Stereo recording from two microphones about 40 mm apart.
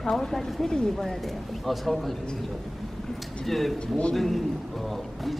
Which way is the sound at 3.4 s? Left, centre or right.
Centre.